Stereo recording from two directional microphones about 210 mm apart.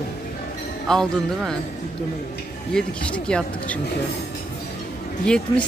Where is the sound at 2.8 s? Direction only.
5° left (ahead or behind).